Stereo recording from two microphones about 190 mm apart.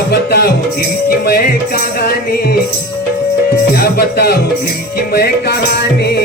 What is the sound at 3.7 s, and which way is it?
Music, 55° left (ahead or behind).